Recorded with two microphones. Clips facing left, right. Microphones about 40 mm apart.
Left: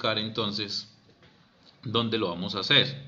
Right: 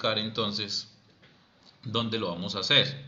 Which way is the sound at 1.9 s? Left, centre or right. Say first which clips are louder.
Left 3 dB; centre.